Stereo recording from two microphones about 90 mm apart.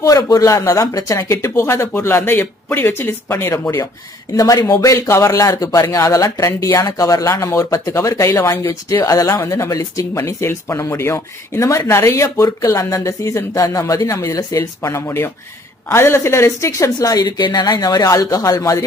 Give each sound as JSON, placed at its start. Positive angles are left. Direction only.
{"t": 0.0, "sound": "speech", "side_deg": 40}
{"t": 4.4, "sound": "speech", "side_deg": 40}